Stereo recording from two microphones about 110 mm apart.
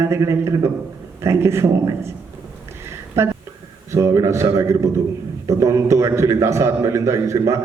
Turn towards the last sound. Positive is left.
turn(degrees=-30)  # may be behind; listen again after turning